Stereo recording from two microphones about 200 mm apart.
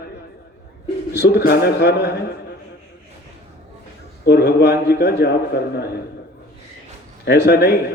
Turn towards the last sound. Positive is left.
turn(degrees=55)  # may be behind; listen again after turning